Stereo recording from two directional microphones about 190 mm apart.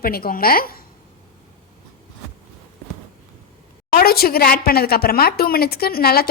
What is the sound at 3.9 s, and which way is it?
A woman's voice, 50° left (ahead or behind).